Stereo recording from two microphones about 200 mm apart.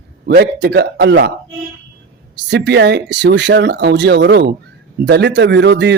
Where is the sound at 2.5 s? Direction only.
60° right (ahead or behind).